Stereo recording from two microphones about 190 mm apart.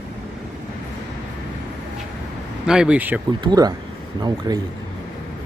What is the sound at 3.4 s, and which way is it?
Speech, 20° right (ahead or behind).